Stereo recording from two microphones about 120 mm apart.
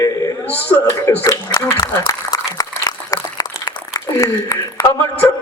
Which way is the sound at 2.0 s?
30° left (ahead or behind).